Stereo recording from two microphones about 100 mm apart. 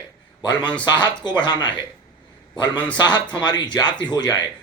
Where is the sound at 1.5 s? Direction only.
50° left (ahead or behind).